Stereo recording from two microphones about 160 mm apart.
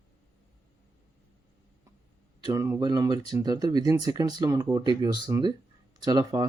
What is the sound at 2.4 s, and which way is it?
Speech, 20° right (ahead or behind).